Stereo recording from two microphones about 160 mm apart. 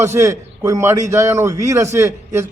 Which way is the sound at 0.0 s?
20° right (ahead or behind).